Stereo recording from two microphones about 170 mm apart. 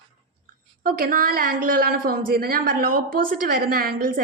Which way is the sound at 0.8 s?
55° right (ahead or behind).